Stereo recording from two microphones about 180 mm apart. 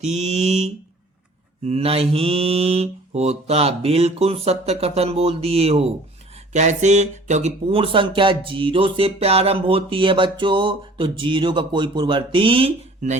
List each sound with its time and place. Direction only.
0.0 s mantra: 35° right (ahead or behind)
6.5 s speech: 40° right (ahead or behind)